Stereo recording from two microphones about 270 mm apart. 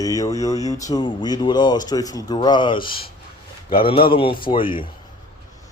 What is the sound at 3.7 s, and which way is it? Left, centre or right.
Speech, centre.